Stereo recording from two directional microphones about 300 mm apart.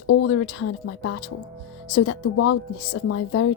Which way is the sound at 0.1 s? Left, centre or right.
Left.